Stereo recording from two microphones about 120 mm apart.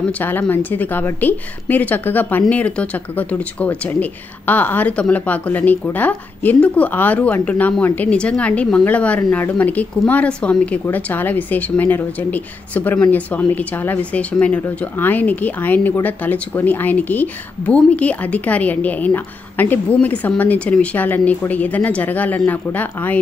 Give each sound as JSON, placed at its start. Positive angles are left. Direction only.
{"t": 0.1, "sound": "speech", "side_deg": 15}